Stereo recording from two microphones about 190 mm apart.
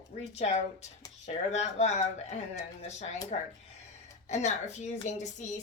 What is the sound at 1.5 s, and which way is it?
A woman's voice, 35° left (ahead or behind).